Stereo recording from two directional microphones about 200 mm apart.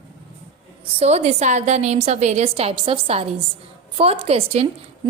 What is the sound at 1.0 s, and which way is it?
A woman's voice, 35° right (ahead or behind).